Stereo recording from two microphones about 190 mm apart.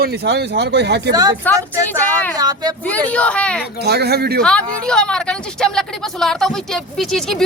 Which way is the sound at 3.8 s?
60° right (ahead or behind).